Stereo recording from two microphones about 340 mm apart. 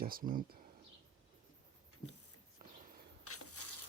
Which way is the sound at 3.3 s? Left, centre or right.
Left.